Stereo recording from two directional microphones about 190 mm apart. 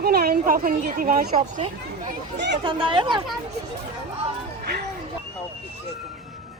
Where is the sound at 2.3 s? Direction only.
65° right (ahead or behind).